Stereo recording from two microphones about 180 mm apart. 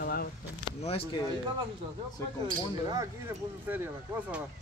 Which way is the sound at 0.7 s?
30° left (ahead or behind).